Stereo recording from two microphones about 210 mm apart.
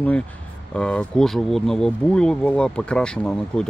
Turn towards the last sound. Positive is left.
turn(degrees=5)  # may be behind; listen again after turning